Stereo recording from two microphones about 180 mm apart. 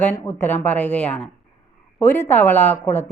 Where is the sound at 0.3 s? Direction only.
10° left (ahead or behind).